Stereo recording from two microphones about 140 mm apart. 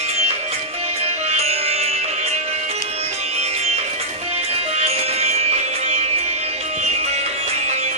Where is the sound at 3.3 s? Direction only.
50° right (ahead or behind).